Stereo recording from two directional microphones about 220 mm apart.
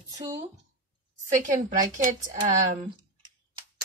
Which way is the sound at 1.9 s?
35° right (ahead or behind).